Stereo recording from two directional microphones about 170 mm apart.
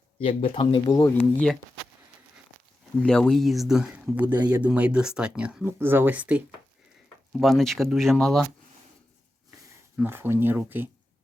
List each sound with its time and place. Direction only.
0.2 s speech: 35° left (ahead or behind)
1.1 s speech: 5° left (ahead or behind)
3.0 s speech: 5° left (ahead or behind)
10.0 s speech: 15° right (ahead or behind)